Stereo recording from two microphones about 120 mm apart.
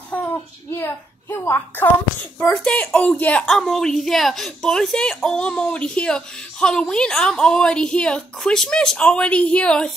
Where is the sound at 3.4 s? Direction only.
Centre (ahead or behind).